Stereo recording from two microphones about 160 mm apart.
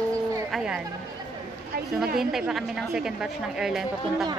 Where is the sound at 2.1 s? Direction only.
Centre (ahead or behind).